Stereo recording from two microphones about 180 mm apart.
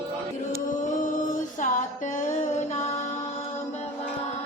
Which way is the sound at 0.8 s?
45° left (ahead or behind).